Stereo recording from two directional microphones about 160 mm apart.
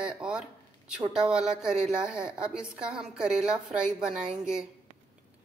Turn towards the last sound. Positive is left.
turn(degrees=-5)  # may be behind; listen again after turning